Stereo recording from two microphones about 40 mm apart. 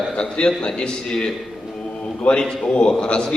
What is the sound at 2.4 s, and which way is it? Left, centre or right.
Speech, left.